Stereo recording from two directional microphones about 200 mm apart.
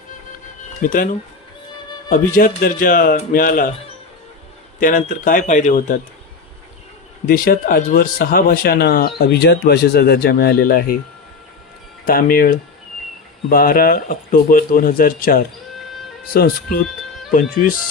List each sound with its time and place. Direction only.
0.8 s speech: 45° left (ahead or behind)
4.8 s speech: 45° left (ahead or behind)
7.3 s speech: 45° left (ahead or behind)
12.0 s speech: 45° left (ahead or behind)